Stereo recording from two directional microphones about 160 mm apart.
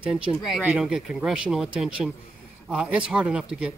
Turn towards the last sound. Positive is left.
turn(degrees=-5)  # may be behind; listen again after turning